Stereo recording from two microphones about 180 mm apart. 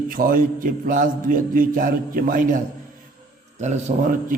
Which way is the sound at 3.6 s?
40° right (ahead or behind).